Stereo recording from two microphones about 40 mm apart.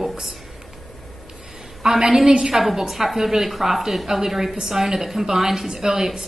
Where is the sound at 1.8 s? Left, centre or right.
Centre.